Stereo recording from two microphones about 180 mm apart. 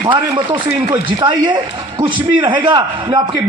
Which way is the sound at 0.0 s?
25° right (ahead or behind).